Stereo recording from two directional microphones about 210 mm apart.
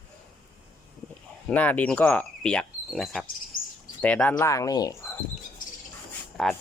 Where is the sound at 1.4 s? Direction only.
5° left (ahead or behind).